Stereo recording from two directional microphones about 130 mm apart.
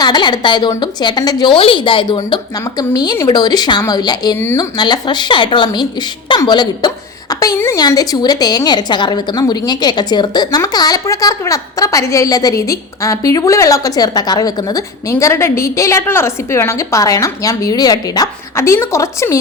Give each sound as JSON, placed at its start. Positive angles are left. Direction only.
{"t": 0.0, "sound": "a woman's voice", "side_deg": 35}
{"t": 1.5, "sound": "a woman's voice", "side_deg": 45}
{"t": 2.1, "sound": "a woman's voice", "side_deg": 30}
{"t": 7.5, "sound": "a woman's voice", "side_deg": 20}
{"t": 7.8, "sound": "a woman's voice", "side_deg": 30}